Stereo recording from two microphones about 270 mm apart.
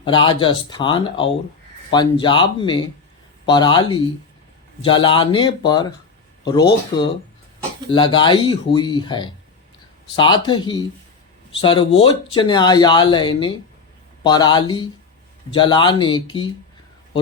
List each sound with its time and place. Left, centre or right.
0.0 s speech: centre
7.9 s speech: centre